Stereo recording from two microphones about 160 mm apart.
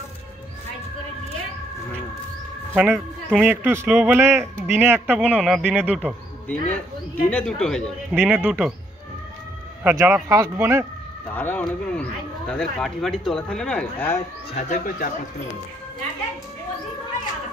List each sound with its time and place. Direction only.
2.7 s a man's voice: 10° right (ahead or behind)
6.7 s speech: 10° left (ahead or behind)
8.1 s a man's voice: 10° right (ahead or behind)
9.8 s a man's voice: 15° right (ahead or behind)
11.2 s speech: 10° left (ahead or behind)
14.5 s speech: 50° left (ahead or behind)